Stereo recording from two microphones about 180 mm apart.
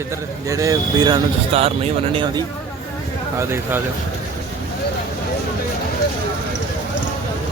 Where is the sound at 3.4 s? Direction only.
15° right (ahead or behind).